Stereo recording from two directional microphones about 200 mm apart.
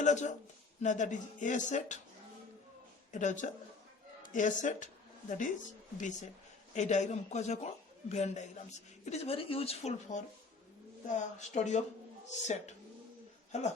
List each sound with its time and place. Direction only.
0.0 s a man's voice: 35° left (ahead or behind)
3.1 s speech: 40° left (ahead or behind)